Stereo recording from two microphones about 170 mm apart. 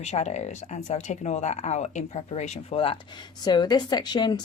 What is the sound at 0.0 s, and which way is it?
Speech, 40° left (ahead or behind).